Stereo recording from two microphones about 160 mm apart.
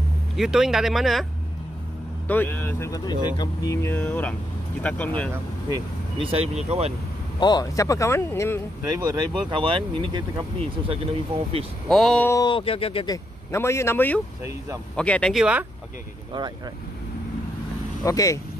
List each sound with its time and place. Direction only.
0.4 s speech: 5° right (ahead or behind)
2.2 s speech: 10° left (ahead or behind)
6.1 s speech: 35° right (ahead or behind)
7.3 s speech: 25° left (ahead or behind)
8.8 s speech: 25° right (ahead or behind)
11.9 s speech: centre (ahead or behind)
12.3 s speech: 25° left (ahead or behind)
13.1 s speech: 15° left (ahead or behind)
18.0 s speech: 20° left (ahead or behind)